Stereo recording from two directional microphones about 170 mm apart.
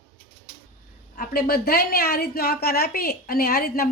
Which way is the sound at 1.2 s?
60° left (ahead or behind).